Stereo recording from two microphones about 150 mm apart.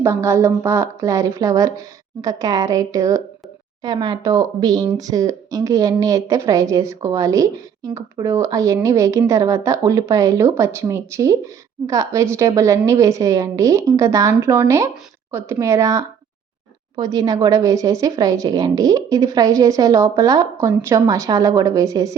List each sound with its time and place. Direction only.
0.0 s a woman's voice: 20° right (ahead or behind)